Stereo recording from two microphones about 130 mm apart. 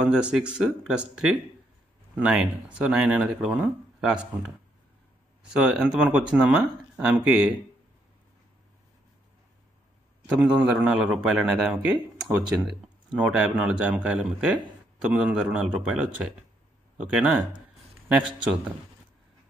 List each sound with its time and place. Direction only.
0.0 s speech: 10° right (ahead or behind)
2.1 s speech: 5° right (ahead or behind)
5.5 s speech: 5° right (ahead or behind)
10.2 s speech: 10° right (ahead or behind)